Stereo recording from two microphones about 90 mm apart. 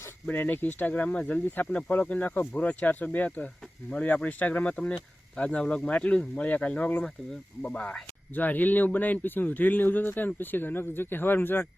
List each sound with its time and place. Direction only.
0.3 s speech: 20° left (ahead or behind)